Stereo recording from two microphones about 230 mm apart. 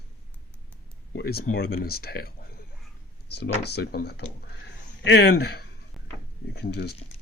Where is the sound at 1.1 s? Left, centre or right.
Left.